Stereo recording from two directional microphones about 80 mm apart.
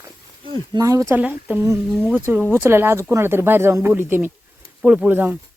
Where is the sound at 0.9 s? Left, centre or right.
Right.